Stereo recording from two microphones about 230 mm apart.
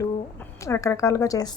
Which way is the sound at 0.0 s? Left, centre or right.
Centre.